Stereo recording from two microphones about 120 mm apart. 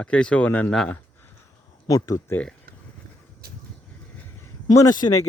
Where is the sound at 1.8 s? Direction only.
30° left (ahead or behind).